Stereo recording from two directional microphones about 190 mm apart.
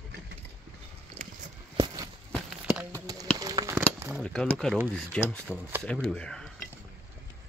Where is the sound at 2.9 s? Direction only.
20° right (ahead or behind).